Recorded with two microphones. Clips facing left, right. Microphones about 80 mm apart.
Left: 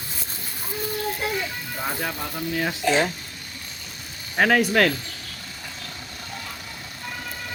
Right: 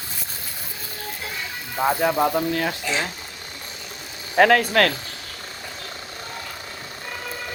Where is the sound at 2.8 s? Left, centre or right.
Left.